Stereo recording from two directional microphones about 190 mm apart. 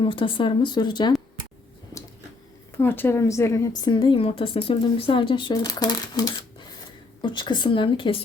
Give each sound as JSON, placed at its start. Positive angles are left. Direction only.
{"t": 0.0, "sound": "a woman's voice", "side_deg": 25}
{"t": 2.7, "sound": "a woman's voice", "side_deg": 10}